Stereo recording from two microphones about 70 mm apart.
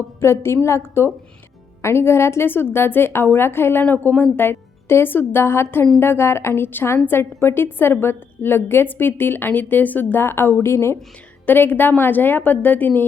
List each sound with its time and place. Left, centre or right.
0.2 s a woman's voice: left